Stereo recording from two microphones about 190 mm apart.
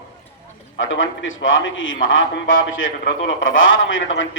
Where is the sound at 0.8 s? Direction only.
90° left.